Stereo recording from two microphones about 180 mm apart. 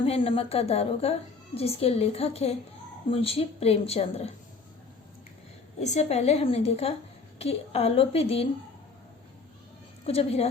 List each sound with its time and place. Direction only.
0.0 s a woman's voice: 30° left (ahead or behind)
5.8 s a woman's voice: 40° left (ahead or behind)
10.1 s a woman's voice: 35° left (ahead or behind)